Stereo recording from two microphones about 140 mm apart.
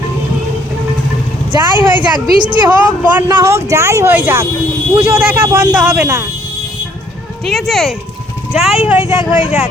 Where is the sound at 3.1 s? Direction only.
20° right (ahead or behind).